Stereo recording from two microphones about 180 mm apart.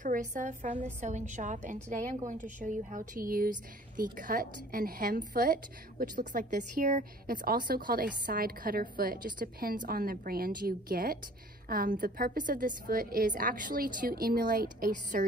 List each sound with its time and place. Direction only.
0.0 s a woman's voice: 45° right (ahead or behind)